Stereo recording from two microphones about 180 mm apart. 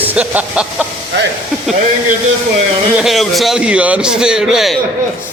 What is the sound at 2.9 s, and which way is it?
A man's voice, centre (ahead or behind).